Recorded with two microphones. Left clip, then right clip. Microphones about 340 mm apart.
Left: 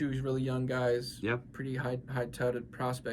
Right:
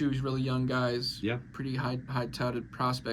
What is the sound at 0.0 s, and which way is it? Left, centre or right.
Speech, centre.